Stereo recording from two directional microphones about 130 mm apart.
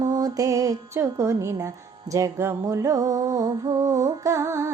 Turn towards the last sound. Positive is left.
turn(degrees=-20)  # may be behind; listen again after turning